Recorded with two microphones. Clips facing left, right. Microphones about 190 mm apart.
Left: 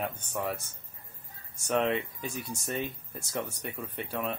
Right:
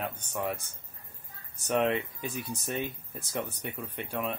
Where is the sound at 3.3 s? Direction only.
Centre (ahead or behind).